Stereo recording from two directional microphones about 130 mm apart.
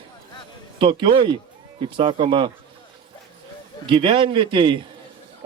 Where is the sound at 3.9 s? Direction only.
40° right (ahead or behind).